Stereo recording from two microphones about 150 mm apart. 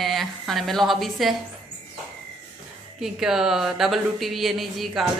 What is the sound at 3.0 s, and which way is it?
A woman's voice, 5° right (ahead or behind).